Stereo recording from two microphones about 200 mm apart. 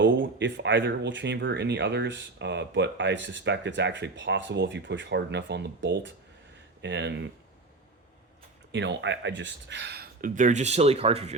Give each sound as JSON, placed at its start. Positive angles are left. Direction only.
{"t": 0.0, "sound": "speech", "side_deg": -65}
{"t": 8.7, "sound": "speech", "side_deg": -65}